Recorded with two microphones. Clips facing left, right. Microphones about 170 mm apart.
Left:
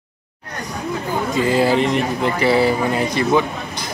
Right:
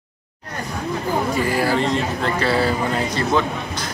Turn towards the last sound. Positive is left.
turn(degrees=15)  # may be behind; listen again after turning